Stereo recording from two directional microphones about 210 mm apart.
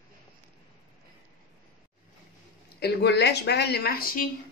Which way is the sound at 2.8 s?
55° left (ahead or behind).